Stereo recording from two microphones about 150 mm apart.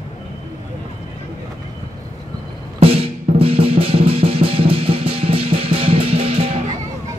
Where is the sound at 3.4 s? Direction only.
40° right (ahead or behind).